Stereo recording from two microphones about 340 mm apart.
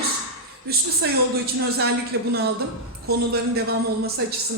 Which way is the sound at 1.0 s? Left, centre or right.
Right.